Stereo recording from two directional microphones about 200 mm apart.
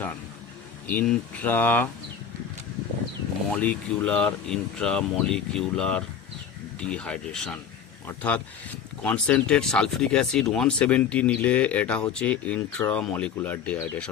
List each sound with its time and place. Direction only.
0.9 s speech: 10° left (ahead or behind)
3.5 s speech: 5° left (ahead or behind)